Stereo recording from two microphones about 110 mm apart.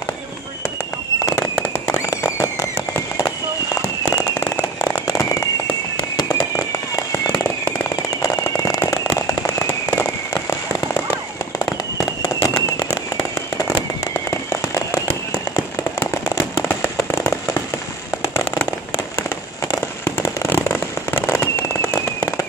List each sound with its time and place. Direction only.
1.2 s fireworks: 25° left (ahead or behind)
16.6 s fireworks: 25° left (ahead or behind)